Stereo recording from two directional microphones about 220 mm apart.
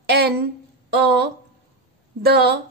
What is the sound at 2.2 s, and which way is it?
Speech, 45° right (ahead or behind).